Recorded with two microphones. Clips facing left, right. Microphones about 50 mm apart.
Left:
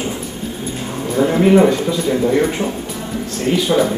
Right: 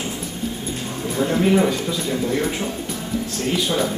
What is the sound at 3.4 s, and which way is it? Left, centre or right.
Speech, centre.